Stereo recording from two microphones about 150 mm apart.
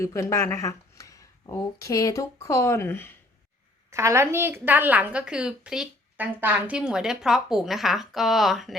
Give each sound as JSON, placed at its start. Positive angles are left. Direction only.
{"t": 0.0, "sound": "speech", "side_deg": 20}
{"t": 3.8, "sound": "a woman's voice", "side_deg": -20}